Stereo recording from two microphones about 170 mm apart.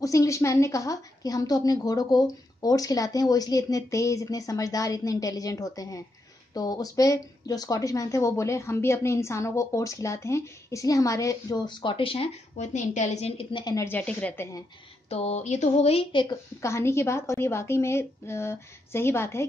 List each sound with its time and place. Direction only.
0.0 s speech: 20° left (ahead or behind)
15.0 s speech: 40° left (ahead or behind)
16.6 s a woman's voice: 15° left (ahead or behind)